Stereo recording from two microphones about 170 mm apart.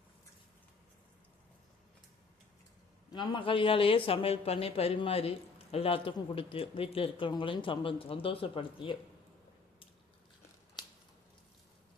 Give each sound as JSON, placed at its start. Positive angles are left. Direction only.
{"t": 3.1, "sound": "speech", "side_deg": 25}